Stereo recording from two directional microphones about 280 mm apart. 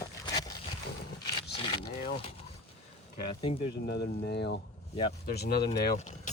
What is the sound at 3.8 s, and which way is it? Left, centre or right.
Speech, left.